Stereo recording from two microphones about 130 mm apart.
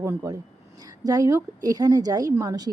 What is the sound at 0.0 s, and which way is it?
A woman's voice, 20° right (ahead or behind).